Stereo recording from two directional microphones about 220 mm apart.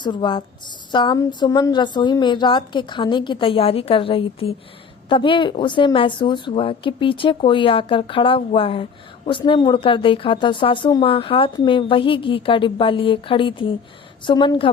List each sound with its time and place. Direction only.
0.0 s speech: 20° left (ahead or behind)